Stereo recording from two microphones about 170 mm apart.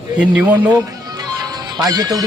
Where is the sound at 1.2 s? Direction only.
25° right (ahead or behind).